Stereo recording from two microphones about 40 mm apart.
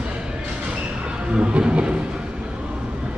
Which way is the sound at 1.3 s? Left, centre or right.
Right.